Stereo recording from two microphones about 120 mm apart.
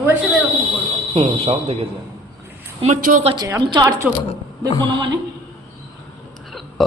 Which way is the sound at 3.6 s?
35° right (ahead or behind).